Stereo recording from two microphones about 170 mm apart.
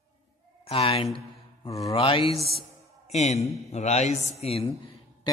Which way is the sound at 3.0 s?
40° left (ahead or behind).